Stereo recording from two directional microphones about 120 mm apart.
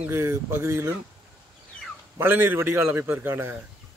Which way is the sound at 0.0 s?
20° right (ahead or behind).